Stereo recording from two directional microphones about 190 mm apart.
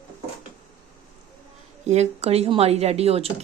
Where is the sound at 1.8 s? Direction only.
35° right (ahead or behind).